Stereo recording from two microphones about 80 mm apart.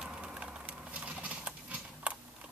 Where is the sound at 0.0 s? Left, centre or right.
Centre.